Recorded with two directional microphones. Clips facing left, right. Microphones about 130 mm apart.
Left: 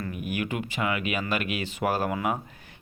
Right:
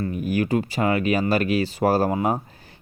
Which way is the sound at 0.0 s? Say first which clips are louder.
Right 7 dB; 35° right (ahead or behind).